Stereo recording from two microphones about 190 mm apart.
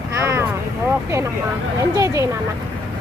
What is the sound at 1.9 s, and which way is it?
Speech, 15° right (ahead or behind).